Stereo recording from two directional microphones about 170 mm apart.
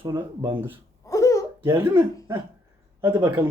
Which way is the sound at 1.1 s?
20° left (ahead or behind).